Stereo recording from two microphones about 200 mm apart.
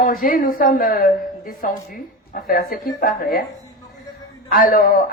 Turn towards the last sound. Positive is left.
turn(degrees=45)  # may be behind; listen again after turning